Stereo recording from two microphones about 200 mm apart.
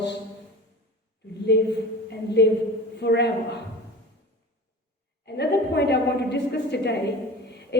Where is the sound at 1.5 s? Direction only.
60° left (ahead or behind).